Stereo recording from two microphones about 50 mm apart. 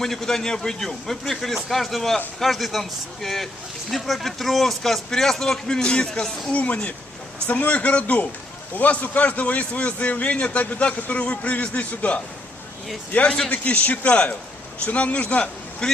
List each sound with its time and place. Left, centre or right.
0.0 s a man's voice: centre
13.7 s a man's voice: left
15.8 s a man's voice: centre